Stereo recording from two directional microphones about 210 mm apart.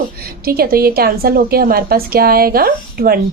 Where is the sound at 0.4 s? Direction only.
45° right (ahead or behind).